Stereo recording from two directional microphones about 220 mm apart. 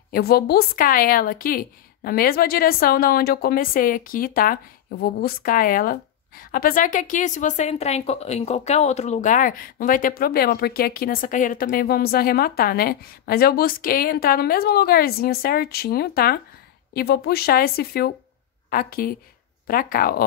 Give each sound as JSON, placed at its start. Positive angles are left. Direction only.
{"t": 0.1, "sound": "a woman's voice", "side_deg": 45}